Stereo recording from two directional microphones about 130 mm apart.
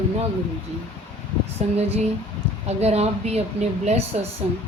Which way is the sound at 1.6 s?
60° right (ahead or behind).